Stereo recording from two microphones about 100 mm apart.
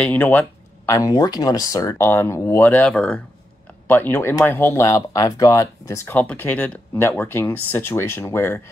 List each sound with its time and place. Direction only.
0.0 s speech: 15° left (ahead or behind)
0.8 s speech: 35° left (ahead or behind)
6.0 s speech: 15° left (ahead or behind)